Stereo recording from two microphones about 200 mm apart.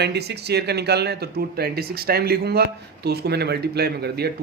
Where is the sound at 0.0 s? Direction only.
55° right (ahead or behind).